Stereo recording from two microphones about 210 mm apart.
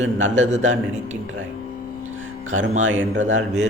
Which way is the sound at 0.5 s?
35° right (ahead or behind).